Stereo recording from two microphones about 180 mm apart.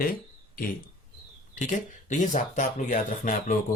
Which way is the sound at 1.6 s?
45° left (ahead or behind).